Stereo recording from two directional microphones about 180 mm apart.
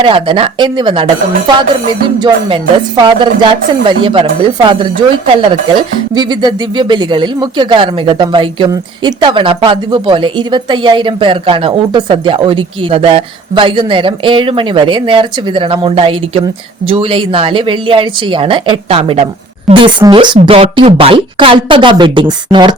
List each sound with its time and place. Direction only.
0.0 s a woman's voice: 30° right (ahead or behind)